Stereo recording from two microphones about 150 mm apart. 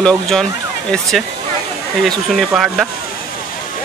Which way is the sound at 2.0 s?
Centre (ahead or behind).